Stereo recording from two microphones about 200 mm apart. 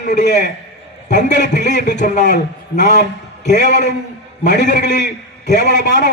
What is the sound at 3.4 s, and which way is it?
A man's voice, 35° left (ahead or behind).